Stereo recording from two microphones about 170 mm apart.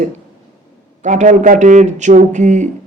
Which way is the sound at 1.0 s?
45° right (ahead or behind).